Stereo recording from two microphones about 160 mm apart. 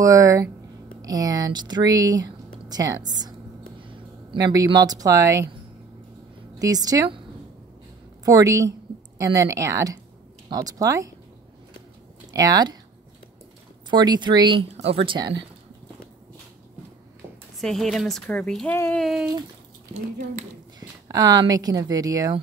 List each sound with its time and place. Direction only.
0.0 s speech: 20° right (ahead or behind)
6.6 s speech: 25° right (ahead or behind)
8.3 s speech: 20° right (ahead or behind)
12.3 s speech: 25° right (ahead or behind)
13.8 s speech: 25° right (ahead or behind)
17.6 s a woman's voice: centre (ahead or behind)
19.0 s a woman's voice: centre (ahead or behind)
21.1 s speech: 25° right (ahead or behind)